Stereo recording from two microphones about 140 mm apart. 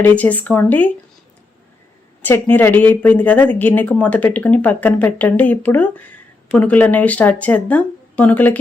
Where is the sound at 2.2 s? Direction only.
15° left (ahead or behind).